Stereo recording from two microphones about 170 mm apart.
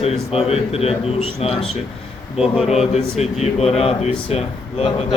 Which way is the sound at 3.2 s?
40° left (ahead or behind).